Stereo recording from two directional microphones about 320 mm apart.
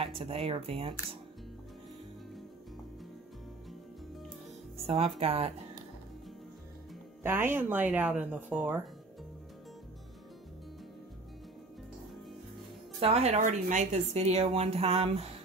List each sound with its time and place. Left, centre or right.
0.0 s speech: centre
4.8 s a woman's voice: centre
7.2 s speech: centre
13.0 s a woman's voice: centre